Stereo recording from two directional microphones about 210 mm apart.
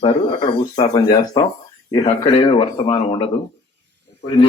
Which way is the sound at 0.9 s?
15° left (ahead or behind).